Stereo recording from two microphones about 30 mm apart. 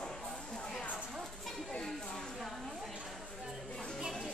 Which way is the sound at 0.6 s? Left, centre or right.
Left.